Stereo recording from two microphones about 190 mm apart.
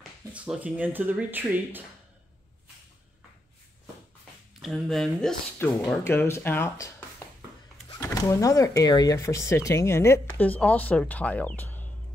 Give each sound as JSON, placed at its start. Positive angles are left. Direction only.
{"t": 0.3, "sound": "speech", "side_deg": -5}
{"t": 4.6, "sound": "speech", "side_deg": 0}
{"t": 8.0, "sound": "speech", "side_deg": 15}